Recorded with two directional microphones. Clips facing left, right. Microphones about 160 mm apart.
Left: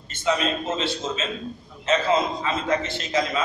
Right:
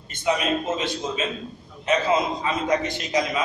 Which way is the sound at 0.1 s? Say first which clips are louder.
Right 1 dB; 15° right (ahead or behind).